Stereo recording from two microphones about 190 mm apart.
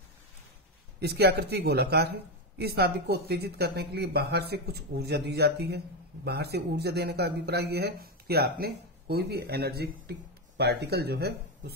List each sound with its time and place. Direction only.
0.9 s speech: 60° right (ahead or behind)